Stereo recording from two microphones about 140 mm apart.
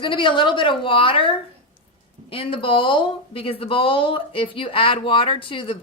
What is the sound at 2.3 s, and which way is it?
Speech, 40° left (ahead or behind).